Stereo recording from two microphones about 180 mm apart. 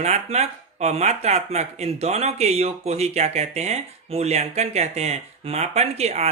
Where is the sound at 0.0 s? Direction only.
35° right (ahead or behind).